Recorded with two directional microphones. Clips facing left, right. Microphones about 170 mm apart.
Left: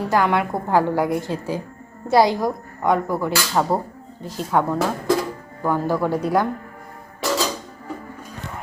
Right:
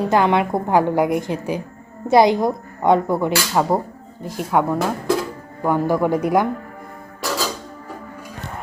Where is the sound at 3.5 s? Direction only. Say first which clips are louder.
Right 2 dB; 10° right (ahead or behind).